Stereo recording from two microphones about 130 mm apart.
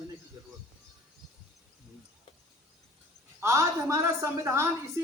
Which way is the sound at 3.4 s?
20° right (ahead or behind).